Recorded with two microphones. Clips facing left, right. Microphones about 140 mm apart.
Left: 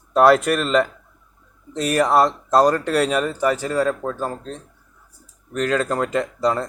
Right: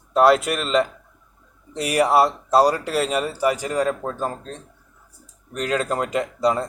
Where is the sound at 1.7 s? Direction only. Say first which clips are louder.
Left 1 dB; 10° right (ahead or behind).